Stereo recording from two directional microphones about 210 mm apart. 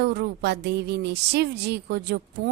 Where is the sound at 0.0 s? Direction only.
50° right (ahead or behind).